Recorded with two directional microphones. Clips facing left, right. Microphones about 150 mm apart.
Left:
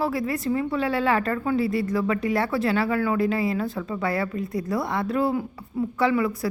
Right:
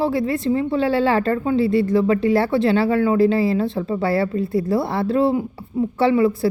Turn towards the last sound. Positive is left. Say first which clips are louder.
# right 6 dB
turn(degrees=-30)  # may be behind; listen again after turning